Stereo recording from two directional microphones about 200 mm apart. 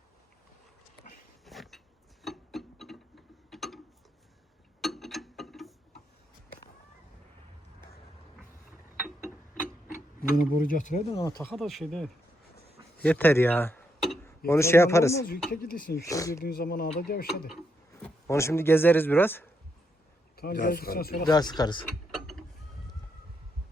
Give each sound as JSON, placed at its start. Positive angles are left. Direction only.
{"t": 1.5, "sound": "a sound", "side_deg": 0}
{"t": 4.8, "sound": "a sound", "side_deg": 0}
{"t": 9.9, "sound": "speech", "side_deg": 45}
{"t": 11.2, "sound": "a man's voice", "side_deg": 15}
{"t": 11.5, "sound": "a man's voice", "side_deg": 0}
{"t": 15.3, "sound": "speech", "side_deg": 50}
{"t": 16.0, "sound": "a man's voice", "side_deg": 15}
{"t": 16.3, "sound": "speech", "side_deg": 45}
{"t": 18.0, "sound": "speech", "side_deg": 15}
{"t": 20.3, "sound": "speech", "side_deg": 50}
{"t": 21.2, "sound": "speech", "side_deg": 20}